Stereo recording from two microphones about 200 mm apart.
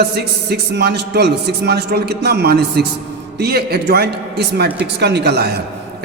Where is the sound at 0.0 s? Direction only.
55° right (ahead or behind).